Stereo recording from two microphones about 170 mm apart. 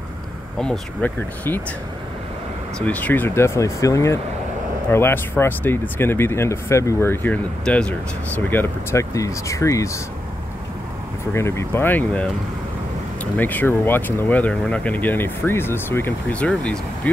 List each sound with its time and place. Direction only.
0.6 s speech: 5° left (ahead or behind)
2.8 s speech: 10° left (ahead or behind)
11.3 s speech: 15° left (ahead or behind)